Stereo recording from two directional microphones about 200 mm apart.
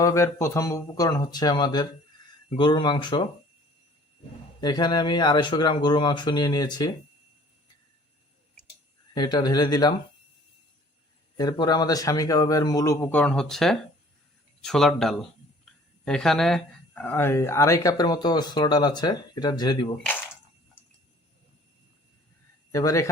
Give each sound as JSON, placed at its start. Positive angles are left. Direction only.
{"t": 0.0, "sound": "speech", "side_deg": 15}
{"t": 4.6, "sound": "speech", "side_deg": 20}
{"t": 9.1, "sound": "speech", "side_deg": 20}
{"t": 11.3, "sound": "speech", "side_deg": 20}
{"t": 22.7, "sound": "speech", "side_deg": 15}